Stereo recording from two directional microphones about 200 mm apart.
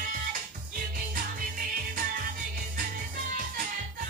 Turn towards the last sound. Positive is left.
turn(degrees=-45)  # may be behind; listen again after turning